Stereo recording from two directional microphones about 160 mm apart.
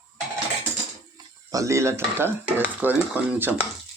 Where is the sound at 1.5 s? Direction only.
20° right (ahead or behind).